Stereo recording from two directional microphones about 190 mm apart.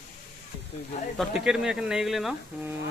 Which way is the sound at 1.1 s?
Centre (ahead or behind).